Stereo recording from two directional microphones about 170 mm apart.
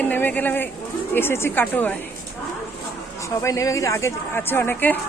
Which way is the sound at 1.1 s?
15° left (ahead or behind).